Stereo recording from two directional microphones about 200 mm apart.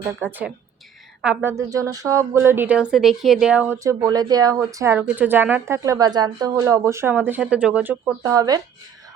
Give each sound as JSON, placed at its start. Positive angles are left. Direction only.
{"t": 0.2, "sound": "speech", "side_deg": -10}
{"t": 8.2, "sound": "speech", "side_deg": -20}